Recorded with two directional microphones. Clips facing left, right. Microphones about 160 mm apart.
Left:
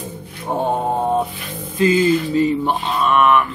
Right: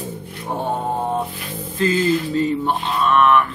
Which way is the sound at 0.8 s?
15° left (ahead or behind).